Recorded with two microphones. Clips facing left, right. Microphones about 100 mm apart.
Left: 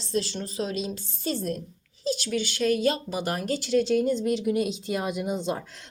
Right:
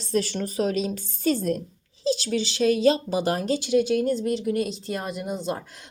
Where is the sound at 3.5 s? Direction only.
10° right (ahead or behind).